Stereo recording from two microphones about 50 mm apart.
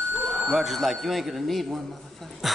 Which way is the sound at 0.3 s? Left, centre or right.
Centre.